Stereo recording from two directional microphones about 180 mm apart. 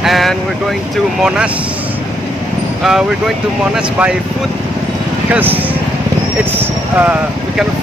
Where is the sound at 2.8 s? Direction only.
5° right (ahead or behind).